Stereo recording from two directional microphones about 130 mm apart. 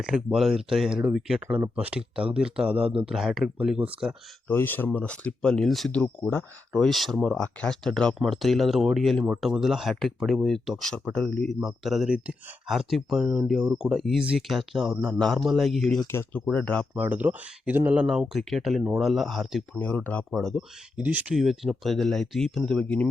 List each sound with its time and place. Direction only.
0.0 s speech: 5° right (ahead or behind)
4.4 s speech: 15° left (ahead or behind); by 14.9 s centre (ahead or behind)
14.9 s speech: 15° right (ahead or behind)
15.2 s speech: centre (ahead or behind)
16.9 s speech: 15° right (ahead or behind)
19.8 s speech: 10° left (ahead or behind)
20.9 s speech: 10° right (ahead or behind); by 23.0 s 5° left (ahead or behind)